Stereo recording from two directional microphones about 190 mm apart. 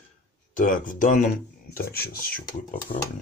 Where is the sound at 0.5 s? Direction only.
45° left (ahead or behind).